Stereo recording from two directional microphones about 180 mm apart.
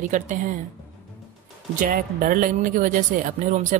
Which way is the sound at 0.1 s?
45° right (ahead or behind).